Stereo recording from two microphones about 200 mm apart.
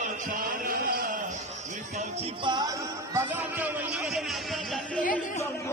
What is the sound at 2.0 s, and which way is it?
Music, 25° right (ahead or behind).